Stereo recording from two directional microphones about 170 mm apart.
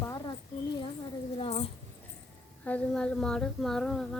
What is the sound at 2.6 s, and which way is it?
A woman's voice, 5° left (ahead or behind).